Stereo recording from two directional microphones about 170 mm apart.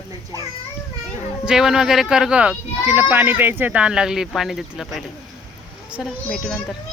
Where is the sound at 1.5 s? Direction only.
5° right (ahead or behind).